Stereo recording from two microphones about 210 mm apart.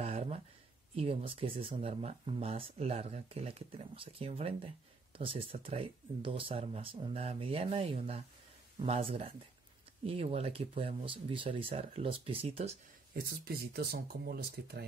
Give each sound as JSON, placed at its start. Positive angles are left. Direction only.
{"t": 0.0, "sound": "a sound", "side_deg": -30}
{"t": 0.9, "sound": "speech", "side_deg": -25}
{"t": 13.7, "sound": "speech", "side_deg": -45}